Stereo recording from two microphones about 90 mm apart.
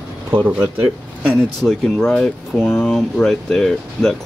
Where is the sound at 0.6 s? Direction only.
20° right (ahead or behind).